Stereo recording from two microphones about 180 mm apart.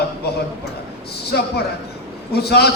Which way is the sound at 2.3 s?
65° left (ahead or behind).